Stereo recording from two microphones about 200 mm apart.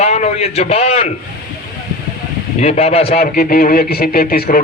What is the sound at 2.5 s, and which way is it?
Speech, 35° left (ahead or behind).